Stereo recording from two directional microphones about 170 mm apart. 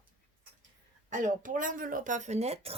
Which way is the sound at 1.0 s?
50° right (ahead or behind).